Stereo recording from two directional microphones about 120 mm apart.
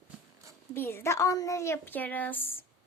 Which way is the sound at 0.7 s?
20° left (ahead or behind).